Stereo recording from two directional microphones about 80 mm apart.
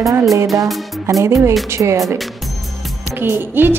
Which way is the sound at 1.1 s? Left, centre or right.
Right.